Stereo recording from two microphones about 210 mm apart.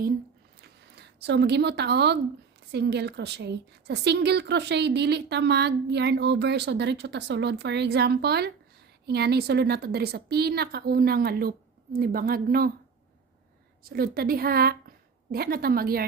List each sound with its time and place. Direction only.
0.6 s a sound: 50° right (ahead or behind)
2.7 s a woman's voice: 50° right (ahead or behind)
13.8 s a woman's voice: 45° right (ahead or behind)